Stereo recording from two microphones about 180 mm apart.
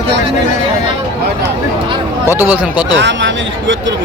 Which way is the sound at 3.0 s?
85° right.